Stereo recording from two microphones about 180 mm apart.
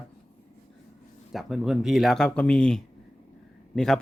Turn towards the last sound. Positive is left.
turn(degrees=0)  # may be behind; listen again after turning